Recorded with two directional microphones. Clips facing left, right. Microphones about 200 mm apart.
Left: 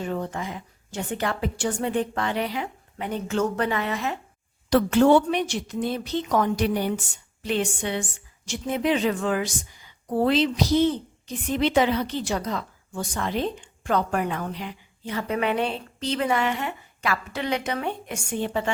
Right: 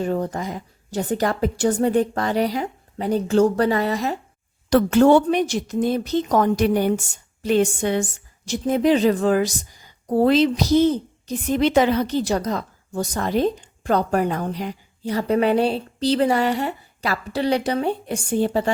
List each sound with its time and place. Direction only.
0.0 s a woman's voice: 40° right (ahead or behind)